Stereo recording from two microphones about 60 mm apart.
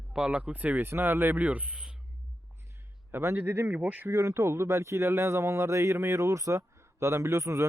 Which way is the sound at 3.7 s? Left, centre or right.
Right.